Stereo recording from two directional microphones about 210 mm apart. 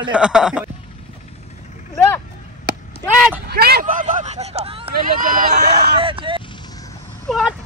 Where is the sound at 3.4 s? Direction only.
50° right (ahead or behind); by 4.9 s 25° right (ahead or behind).